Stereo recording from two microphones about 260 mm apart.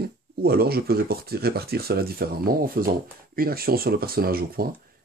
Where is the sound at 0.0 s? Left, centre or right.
Right.